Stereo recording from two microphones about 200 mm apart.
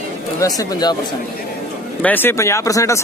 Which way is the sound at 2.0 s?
10° left (ahead or behind).